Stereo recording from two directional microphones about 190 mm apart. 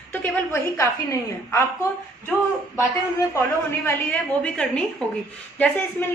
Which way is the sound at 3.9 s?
5° left (ahead or behind).